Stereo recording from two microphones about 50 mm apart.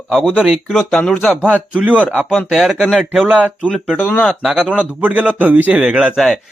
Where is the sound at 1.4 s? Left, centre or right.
Right.